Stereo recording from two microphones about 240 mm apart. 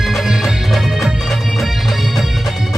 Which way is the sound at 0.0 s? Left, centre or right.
Centre.